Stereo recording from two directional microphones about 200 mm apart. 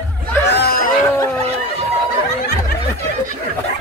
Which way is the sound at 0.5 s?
50° left (ahead or behind).